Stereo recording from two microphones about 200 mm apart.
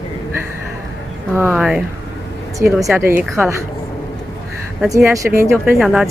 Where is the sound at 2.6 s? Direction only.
45° right (ahead or behind).